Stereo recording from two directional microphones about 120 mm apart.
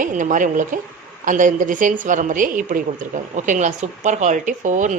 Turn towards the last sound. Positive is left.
turn(degrees=-90)